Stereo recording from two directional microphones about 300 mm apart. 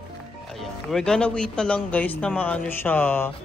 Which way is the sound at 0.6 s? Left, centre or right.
Centre.